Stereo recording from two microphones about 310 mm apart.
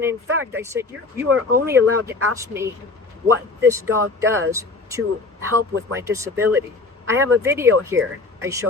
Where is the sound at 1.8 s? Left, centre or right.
Right.